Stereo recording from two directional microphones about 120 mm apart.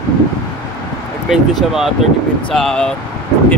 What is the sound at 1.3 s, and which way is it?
Speech, 5° right (ahead or behind).